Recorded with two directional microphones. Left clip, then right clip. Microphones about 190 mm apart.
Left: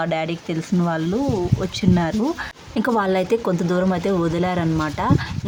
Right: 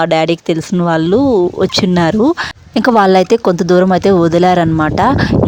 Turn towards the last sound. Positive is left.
turn(degrees=-55)  # may be behind; listen again after turning